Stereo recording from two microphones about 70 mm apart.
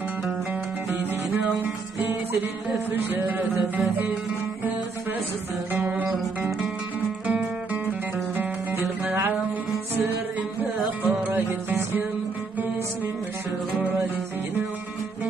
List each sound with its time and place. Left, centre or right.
2.9 s music: right
5.7 s music: right
10.6 s music: right